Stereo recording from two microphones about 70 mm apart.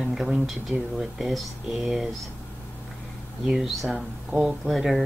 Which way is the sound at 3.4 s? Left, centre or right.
Centre.